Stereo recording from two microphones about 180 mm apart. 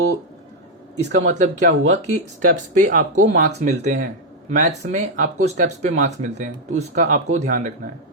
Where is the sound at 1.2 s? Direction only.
40° right (ahead or behind).